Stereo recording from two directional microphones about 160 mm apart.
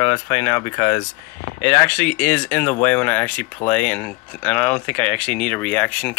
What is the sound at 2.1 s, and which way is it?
Speech, 10° left (ahead or behind).